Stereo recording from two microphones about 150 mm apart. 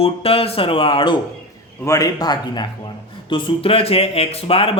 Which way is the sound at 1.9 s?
25° left (ahead or behind).